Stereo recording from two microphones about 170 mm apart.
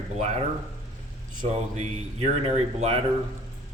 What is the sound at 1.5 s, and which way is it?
Speech, 40° right (ahead or behind).